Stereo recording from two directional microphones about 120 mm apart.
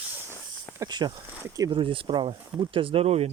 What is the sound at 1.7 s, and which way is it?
Speech, 45° right (ahead or behind).